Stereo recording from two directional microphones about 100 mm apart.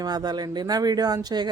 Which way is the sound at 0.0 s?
45° right (ahead or behind).